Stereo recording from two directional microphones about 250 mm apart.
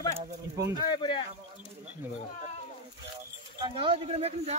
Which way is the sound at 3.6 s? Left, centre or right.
Right.